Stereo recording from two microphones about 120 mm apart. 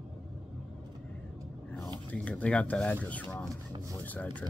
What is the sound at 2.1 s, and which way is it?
Speech, 10° left (ahead or behind).